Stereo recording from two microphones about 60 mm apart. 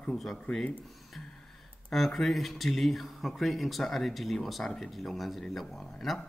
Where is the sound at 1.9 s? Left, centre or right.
Centre.